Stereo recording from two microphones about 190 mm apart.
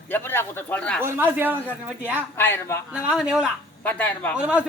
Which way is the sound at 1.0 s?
10° right (ahead or behind).